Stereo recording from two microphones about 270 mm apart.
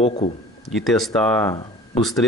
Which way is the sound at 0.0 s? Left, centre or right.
Left.